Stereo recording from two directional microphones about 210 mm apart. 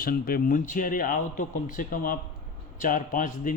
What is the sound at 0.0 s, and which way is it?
A man's voice, 45° left (ahead or behind).